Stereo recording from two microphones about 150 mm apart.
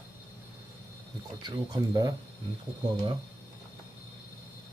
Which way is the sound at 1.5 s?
25° right (ahead or behind).